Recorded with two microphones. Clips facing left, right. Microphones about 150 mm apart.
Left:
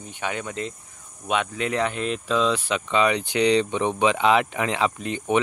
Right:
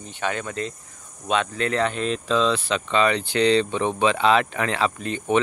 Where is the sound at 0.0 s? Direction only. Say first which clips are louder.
Right 2 dB; 15° left (ahead or behind).